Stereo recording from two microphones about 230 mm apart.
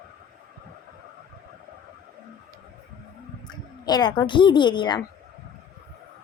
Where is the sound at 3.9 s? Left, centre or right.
Centre.